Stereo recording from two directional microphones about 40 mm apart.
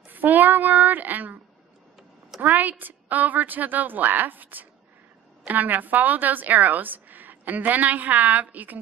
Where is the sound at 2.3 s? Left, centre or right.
Right.